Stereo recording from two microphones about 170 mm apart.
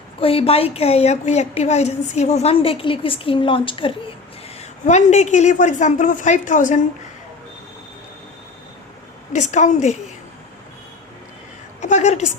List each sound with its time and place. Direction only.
0.2 s a woman's voice: 35° left (ahead or behind)
9.3 s a woman's voice: 45° left (ahead or behind)
11.8 s a sound: 45° left (ahead or behind)